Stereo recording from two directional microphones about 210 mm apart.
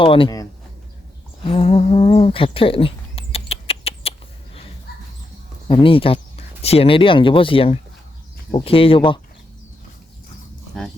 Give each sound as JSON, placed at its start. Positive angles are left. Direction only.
{"t": 0.0, "sound": "speech", "side_deg": 25}
{"t": 1.5, "sound": "a sound", "side_deg": 25}
{"t": 5.6, "sound": "speech", "side_deg": 25}